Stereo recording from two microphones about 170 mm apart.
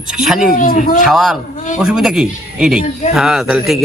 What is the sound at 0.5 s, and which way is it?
Speech, 50° left (ahead or behind).